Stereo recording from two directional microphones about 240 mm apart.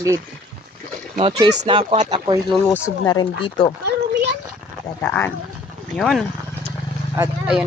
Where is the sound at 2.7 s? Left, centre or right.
Centre.